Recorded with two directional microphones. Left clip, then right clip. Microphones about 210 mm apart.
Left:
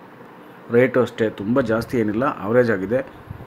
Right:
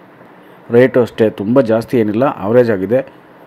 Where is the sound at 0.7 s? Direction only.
15° right (ahead or behind).